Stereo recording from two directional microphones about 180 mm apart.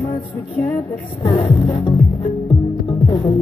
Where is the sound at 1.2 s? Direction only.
20° left (ahead or behind).